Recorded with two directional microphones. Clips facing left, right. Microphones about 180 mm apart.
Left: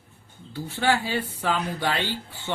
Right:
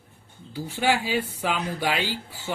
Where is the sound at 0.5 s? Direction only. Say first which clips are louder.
Even; 10° right (ahead or behind).